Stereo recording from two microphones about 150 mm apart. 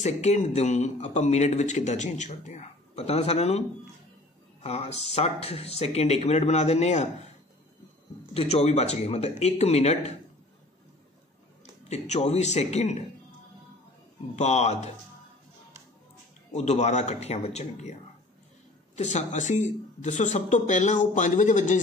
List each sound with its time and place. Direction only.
0.0 s speech: 50° left (ahead or behind)
4.6 s speech: 45° left (ahead or behind)
8.3 s speech: 40° left (ahead or behind)
11.9 s speech: 45° left (ahead or behind)
14.3 s speech: 45° left (ahead or behind)
16.5 s speech: 50° left (ahead or behind)
18.9 s speech: 50° left (ahead or behind)